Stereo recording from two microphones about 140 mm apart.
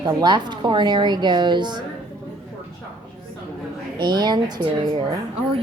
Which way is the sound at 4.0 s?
30° right (ahead or behind).